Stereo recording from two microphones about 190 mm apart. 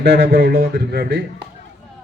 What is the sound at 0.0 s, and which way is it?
A man's voice, 60° right (ahead or behind).